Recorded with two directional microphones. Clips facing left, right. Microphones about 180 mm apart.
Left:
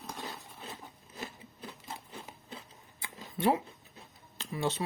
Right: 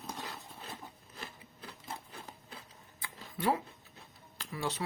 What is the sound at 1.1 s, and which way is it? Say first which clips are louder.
Rub: left 9 dB; 20° left (ahead or behind).